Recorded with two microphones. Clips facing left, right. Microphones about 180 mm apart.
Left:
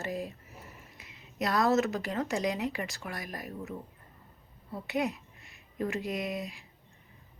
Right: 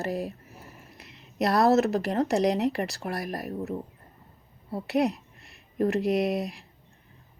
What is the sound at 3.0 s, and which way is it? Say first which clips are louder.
Speech: right 8 dB; 35° right (ahead or behind).